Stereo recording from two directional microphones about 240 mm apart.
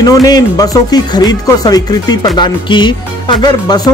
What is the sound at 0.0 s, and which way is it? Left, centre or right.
Speech, centre.